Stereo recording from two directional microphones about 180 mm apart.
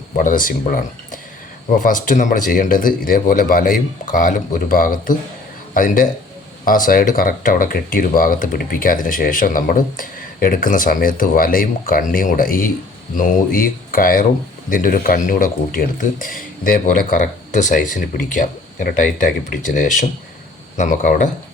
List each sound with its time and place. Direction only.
0.2 s speech: 50° left (ahead or behind)